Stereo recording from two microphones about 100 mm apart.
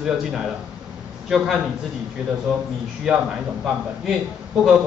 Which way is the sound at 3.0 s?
5° right (ahead or behind).